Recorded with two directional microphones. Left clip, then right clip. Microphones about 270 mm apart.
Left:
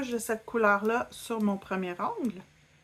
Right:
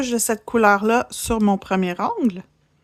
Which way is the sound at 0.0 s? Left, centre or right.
Right.